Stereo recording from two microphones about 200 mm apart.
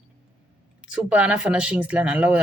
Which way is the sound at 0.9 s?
5° right (ahead or behind).